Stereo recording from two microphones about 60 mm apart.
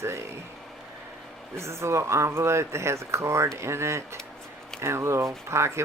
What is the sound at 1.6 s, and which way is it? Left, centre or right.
Speech, right.